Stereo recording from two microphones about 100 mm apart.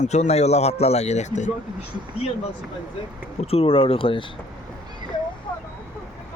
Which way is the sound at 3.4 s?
80° left.